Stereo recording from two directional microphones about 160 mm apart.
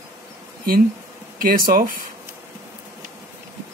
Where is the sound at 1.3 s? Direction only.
60° right (ahead or behind).